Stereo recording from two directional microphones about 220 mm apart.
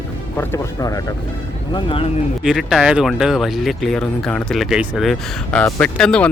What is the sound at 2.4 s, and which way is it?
Speech, centre (ahead or behind).